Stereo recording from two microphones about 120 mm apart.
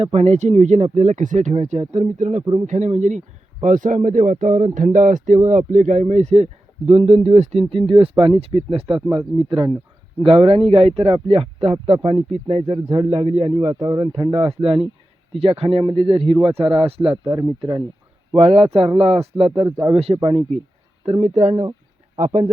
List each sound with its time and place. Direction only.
0.0 s speech: 60° right (ahead or behind)
2.4 s speech: 45° right (ahead or behind)
2.6 s speech: 85° right; by 7.6 s 65° right (ahead or behind)
7.6 s speech: 45° right (ahead or behind)
9.0 s speech: 40° right (ahead or behind)
13.7 s speech: 40° right (ahead or behind)
14.4 s speech: 55° right (ahead or behind)
18.3 s speech: 55° right (ahead or behind)
19.6 s speech: 25° right (ahead or behind)
19.9 s speech: 55° right (ahead or behind); by 21.5 s 75° right (ahead or behind)
22.2 s speech: 60° right (ahead or behind)